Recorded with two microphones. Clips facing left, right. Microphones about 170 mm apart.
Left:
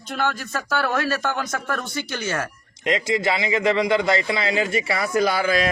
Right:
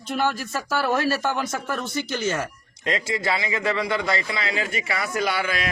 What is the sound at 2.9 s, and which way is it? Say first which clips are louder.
A man's voice: left 3 dB; 20° left (ahead or behind).